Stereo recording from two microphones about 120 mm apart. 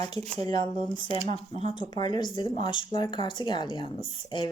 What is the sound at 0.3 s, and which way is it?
Speech, 35° left (ahead or behind).